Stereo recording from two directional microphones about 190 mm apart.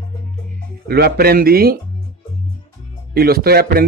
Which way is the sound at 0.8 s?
55° right (ahead or behind).